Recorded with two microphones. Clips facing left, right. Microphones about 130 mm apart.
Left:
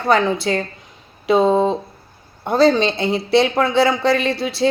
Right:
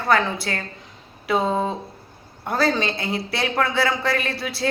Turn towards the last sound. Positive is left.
turn(degrees=25)  # may be behind; listen again after turning